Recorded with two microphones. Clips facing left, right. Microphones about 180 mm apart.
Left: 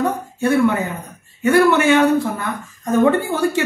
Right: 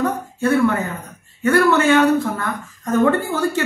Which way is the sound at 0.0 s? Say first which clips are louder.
Left 1 dB; 10° left (ahead or behind).